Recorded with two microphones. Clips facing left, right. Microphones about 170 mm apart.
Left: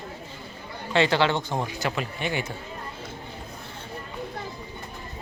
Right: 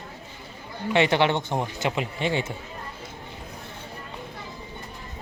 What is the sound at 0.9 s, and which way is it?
Speech, 20° right (ahead or behind).